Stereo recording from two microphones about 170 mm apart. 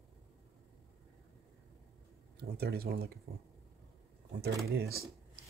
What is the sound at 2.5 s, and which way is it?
Speech, 70° right (ahead or behind).